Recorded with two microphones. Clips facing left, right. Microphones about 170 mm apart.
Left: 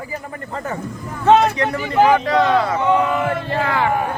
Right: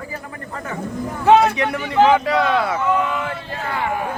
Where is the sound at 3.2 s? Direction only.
70° left (ahead or behind).